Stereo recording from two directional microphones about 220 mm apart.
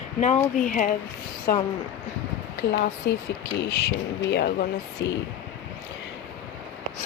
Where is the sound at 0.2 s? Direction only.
30° left (ahead or behind).